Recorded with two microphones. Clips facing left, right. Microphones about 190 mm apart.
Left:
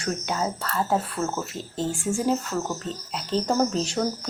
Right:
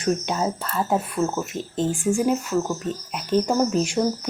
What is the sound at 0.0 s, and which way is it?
Speech, 20° right (ahead or behind).